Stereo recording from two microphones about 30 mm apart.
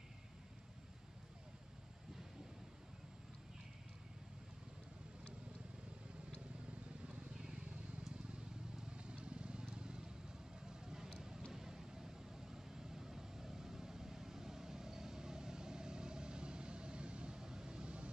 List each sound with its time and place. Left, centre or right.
7.3 s vehicle: right
8.9 s vehicle: right
17.4 s vehicle: centre
17.8 s vehicle: right